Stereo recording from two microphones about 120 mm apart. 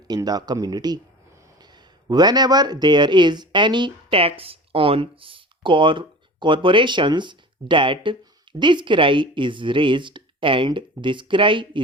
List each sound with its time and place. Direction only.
0.1 s speech: 35° right (ahead or behind)
2.0 s speech: 35° right (ahead or behind)